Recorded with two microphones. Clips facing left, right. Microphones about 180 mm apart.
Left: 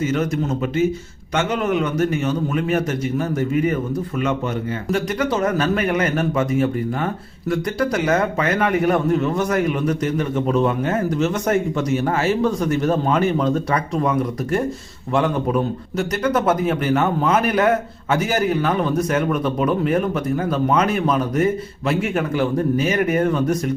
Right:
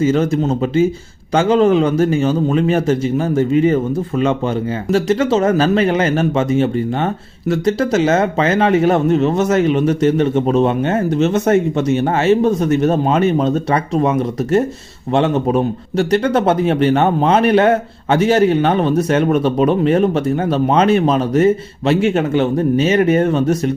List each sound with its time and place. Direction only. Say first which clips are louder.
0.0 s a man's voice: right 6 dB; 30° right (ahead or behind)
4.9 s a man's voice: right 7 dB; 25° right (ahead or behind)